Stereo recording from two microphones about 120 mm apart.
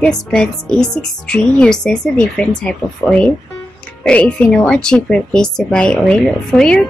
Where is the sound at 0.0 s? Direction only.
5° left (ahead or behind).